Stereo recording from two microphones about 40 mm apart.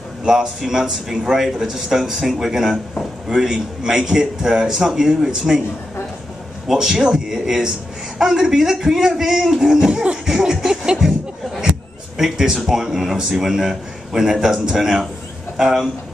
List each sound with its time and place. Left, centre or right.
0.2 s a man's voice: centre
6.7 s a man's voice: centre
10.2 s a sound: centre
12.2 s a man's voice: centre